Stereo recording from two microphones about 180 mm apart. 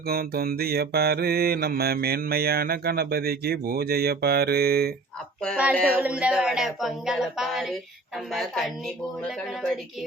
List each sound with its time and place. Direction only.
0.1 s mantra: 55° right (ahead or behind)
5.8 s speech: 10° right (ahead or behind)